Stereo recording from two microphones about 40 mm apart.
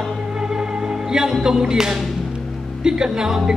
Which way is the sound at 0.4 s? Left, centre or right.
Centre.